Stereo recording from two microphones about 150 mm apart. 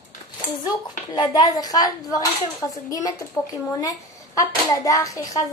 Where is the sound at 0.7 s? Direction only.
30° left (ahead or behind).